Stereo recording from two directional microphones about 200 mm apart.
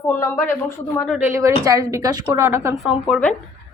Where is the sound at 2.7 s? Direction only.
Centre (ahead or behind).